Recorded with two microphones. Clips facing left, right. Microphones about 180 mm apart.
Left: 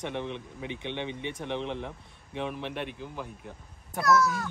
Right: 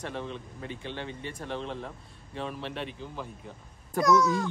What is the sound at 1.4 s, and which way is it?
A child's voice, 20° left (ahead or behind).